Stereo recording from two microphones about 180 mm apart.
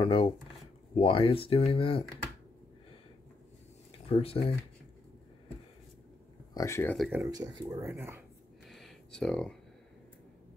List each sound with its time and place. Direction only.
0.0 s speech: 30° left (ahead or behind)
4.1 s speech: 35° left (ahead or behind)
6.5 s speech: 15° left (ahead or behind)
7.1 s speech: 20° right (ahead or behind)
8.6 s a sound: centre (ahead or behind)